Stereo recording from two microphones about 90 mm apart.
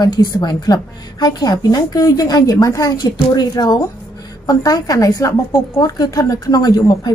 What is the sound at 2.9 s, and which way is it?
A woman's voice, 50° left (ahead or behind).